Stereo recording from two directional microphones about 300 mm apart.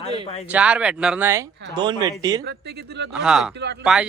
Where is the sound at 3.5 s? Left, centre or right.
Right.